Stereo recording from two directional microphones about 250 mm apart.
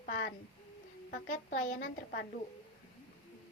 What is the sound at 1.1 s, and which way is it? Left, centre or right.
A woman's voice, left.